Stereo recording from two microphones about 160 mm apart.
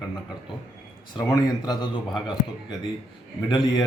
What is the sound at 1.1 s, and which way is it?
Speech, 25° left (ahead or behind).